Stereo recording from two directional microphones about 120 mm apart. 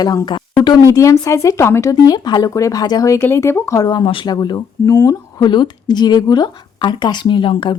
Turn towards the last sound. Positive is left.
turn(degrees=45)  # may be behind; listen again after turning